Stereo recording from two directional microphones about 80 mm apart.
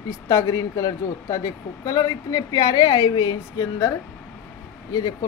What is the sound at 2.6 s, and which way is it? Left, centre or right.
A woman's voice, left.